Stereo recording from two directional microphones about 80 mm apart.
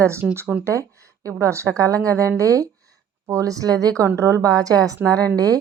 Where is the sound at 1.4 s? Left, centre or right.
Right.